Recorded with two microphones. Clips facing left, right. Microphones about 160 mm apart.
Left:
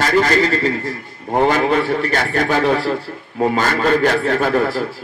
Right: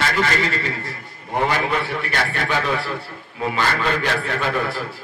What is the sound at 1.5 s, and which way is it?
A man's voice, 45° left (ahead or behind).